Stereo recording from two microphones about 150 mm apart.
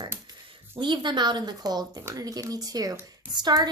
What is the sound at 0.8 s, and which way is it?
A woman's voice, 30° right (ahead or behind).